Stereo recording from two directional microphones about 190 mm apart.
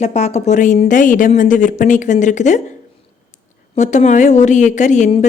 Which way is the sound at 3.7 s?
40° left (ahead or behind).